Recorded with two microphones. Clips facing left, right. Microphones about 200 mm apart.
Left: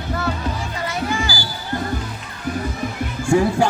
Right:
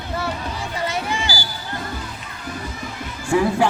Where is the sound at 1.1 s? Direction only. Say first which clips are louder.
Left 2 dB; 25° right (ahead or behind).